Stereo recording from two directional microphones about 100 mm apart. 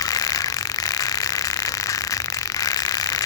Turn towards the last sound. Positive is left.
turn(degrees=40)  # may be behind; listen again after turning